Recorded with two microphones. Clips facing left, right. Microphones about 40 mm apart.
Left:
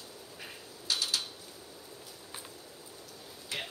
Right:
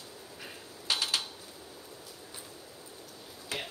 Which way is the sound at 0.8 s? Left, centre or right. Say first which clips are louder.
Right 2 dB; right.